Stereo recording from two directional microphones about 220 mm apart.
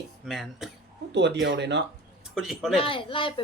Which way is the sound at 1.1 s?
50° right (ahead or behind).